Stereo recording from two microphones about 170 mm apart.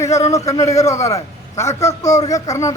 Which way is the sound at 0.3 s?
20° left (ahead or behind).